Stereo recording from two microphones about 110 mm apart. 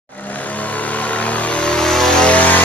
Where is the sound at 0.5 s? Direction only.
15° left (ahead or behind).